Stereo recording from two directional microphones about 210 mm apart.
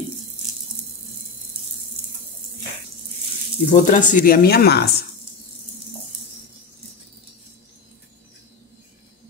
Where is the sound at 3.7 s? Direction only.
35° left (ahead or behind).